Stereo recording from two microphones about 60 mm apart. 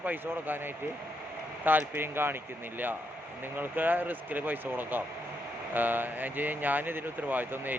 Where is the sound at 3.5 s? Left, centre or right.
Right.